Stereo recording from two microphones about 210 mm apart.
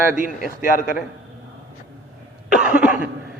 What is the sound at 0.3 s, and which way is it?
Speech, 40° left (ahead or behind).